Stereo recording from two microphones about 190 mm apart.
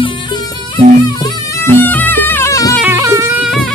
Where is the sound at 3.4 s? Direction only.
Centre (ahead or behind).